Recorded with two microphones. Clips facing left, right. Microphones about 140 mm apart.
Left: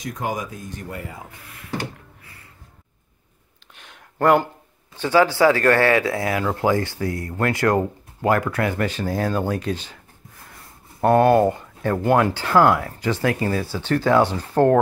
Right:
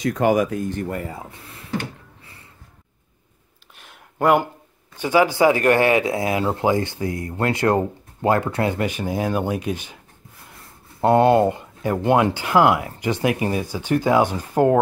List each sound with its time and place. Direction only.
0.0 s speech: 75° right (ahead or behind); by 1.0 s 55° right (ahead or behind)
1.0 s speech: 30° right (ahead or behind)
3.7 s a sound: 5° right (ahead or behind)
4.9 s speech: 15° right (ahead or behind)
11.0 s speech: 20° right (ahead or behind)